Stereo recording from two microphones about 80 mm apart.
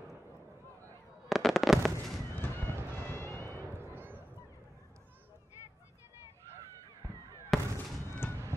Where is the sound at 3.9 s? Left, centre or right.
Right.